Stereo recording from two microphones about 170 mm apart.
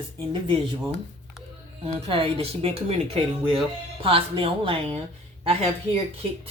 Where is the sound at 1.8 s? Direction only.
35° right (ahead or behind).